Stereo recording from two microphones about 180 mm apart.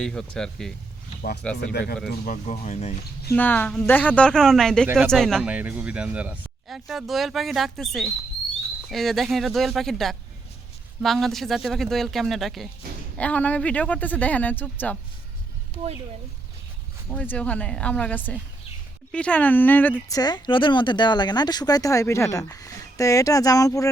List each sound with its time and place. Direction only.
0.0 s speech: 5° left (ahead or behind)
1.7 s speech: 65° left (ahead or behind)
2.0 s speech: 50° left (ahead or behind)
3.3 s speech: 10° left (ahead or behind)
4.9 s speech: 10° right (ahead or behind)
5.1 s speech: 5° left (ahead or behind)
17.1 s speech: 5° left (ahead or behind)